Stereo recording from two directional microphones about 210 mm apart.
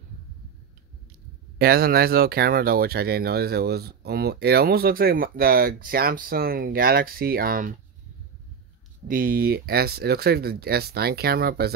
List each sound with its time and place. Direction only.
1.6 s speech: 45° right (ahead or behind)
9.0 s speech: 40° right (ahead or behind)